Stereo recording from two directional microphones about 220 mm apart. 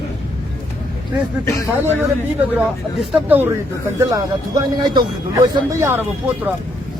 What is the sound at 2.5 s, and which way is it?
Speech, 5° right (ahead or behind).